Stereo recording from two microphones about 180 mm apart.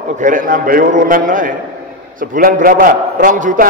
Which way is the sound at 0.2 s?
50° right (ahead or behind).